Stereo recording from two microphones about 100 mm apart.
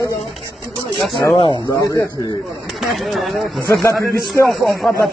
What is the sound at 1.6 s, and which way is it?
Speech, 30° left (ahead or behind).